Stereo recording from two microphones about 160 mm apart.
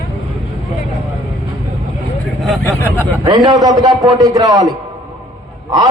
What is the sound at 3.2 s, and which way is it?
A man's voice, 25° right (ahead or behind).